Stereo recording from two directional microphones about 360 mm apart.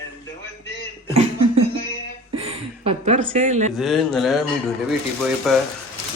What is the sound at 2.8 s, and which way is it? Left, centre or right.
Speech, centre.